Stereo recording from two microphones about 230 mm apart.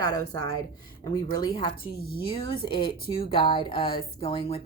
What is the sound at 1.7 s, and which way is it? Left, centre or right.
Speech, left.